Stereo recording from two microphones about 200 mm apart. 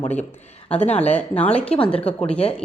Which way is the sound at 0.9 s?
30° left (ahead or behind).